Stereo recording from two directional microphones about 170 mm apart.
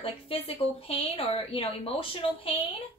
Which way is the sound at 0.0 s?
35° left (ahead or behind).